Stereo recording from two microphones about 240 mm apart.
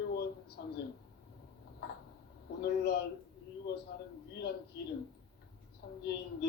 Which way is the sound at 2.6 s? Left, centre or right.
Left.